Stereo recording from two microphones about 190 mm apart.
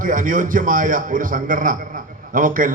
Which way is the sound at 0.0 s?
45° right (ahead or behind).